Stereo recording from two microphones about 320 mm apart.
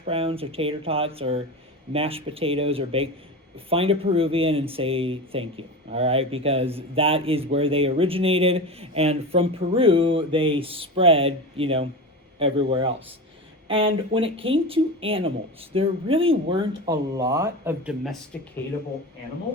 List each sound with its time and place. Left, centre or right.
0.0 s speech: centre